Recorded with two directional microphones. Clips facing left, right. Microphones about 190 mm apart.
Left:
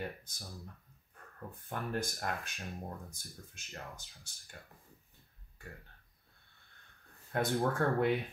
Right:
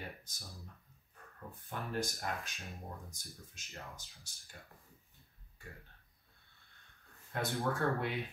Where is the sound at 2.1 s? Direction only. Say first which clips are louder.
Left 2 dB; 55° left (ahead or behind).